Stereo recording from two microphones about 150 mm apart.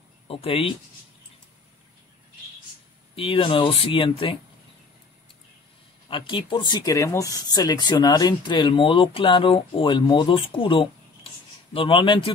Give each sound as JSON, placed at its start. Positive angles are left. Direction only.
{"t": 0.3, "sound": "speech", "side_deg": 40}
{"t": 3.2, "sound": "speech", "side_deg": 35}
{"t": 6.0, "sound": "speech", "side_deg": 35}